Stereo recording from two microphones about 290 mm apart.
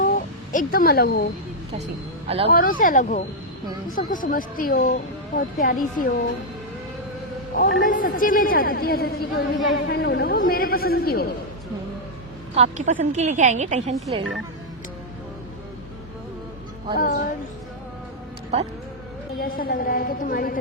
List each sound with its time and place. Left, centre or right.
0.0 s a sound: left
2.2 s speech: centre
2.5 s a woman's voice: left
7.5 s a woman's voice: left
12.5 s a woman's voice: right
16.9 s a woman's voice: left
19.4 s a woman's voice: left